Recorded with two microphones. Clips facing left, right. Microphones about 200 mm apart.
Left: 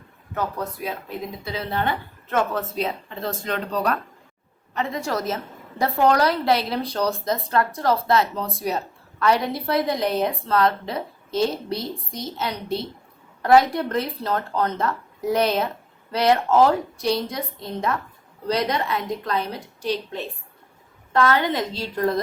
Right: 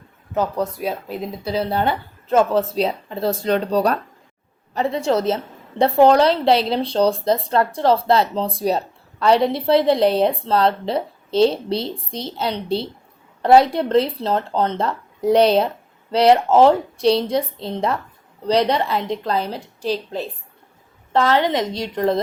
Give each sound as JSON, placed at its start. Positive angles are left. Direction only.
{"t": 1.5, "sound": "a woman's voice", "side_deg": -35}